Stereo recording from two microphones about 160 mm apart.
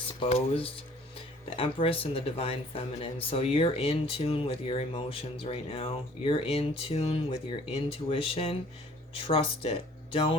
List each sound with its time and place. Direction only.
0.2 s speech: 35° left (ahead or behind)